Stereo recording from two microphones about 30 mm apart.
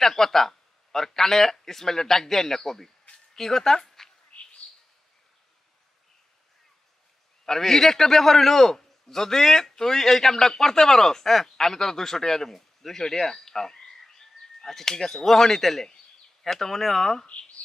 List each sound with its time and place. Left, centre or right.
0.0 s a man's voice: centre
4.3 s bird: left
7.4 s a man's voice: centre